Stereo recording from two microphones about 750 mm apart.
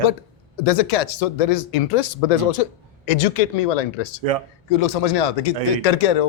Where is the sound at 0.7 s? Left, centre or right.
Left.